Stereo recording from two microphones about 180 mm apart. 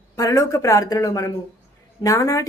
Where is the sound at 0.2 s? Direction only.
20° left (ahead or behind).